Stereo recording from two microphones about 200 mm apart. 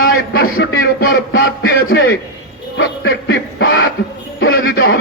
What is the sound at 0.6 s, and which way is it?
Speech, 60° left (ahead or behind).